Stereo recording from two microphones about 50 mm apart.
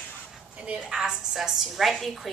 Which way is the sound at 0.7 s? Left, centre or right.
Centre.